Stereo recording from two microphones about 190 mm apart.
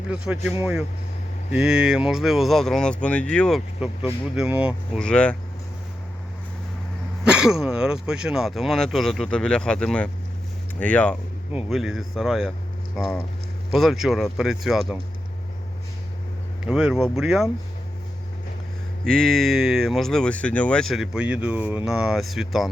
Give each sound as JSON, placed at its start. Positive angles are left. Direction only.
{"t": 0.1, "sound": "a man's voice", "side_deg": -5}
{"t": 4.4, "sound": "speech", "side_deg": -5}
{"t": 5.0, "sound": "speech", "side_deg": 5}
{"t": 7.3, "sound": "speech", "side_deg": -5}
{"t": 16.6, "sound": "speech", "side_deg": -5}
{"t": 19.0, "sound": "speech", "side_deg": 5}